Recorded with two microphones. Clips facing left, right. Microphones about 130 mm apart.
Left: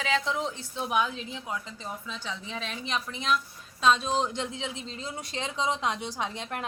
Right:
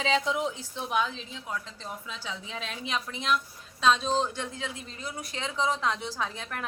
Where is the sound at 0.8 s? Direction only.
5° left (ahead or behind).